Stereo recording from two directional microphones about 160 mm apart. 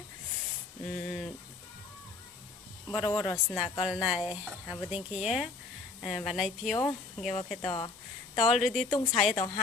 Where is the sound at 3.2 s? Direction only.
Centre (ahead or behind).